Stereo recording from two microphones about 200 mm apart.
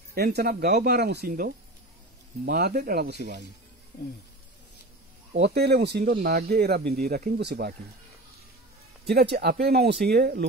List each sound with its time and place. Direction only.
0.1 s speech: 50° right (ahead or behind)
5.3 s speech: 55° right (ahead or behind)
9.0 s speech: 55° right (ahead or behind)